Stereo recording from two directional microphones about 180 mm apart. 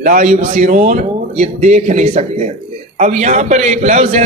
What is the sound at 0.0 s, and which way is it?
A man's voice, 45° right (ahead or behind).